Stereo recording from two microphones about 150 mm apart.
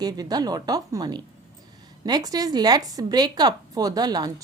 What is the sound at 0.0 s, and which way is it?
A woman's voice, 25° right (ahead or behind).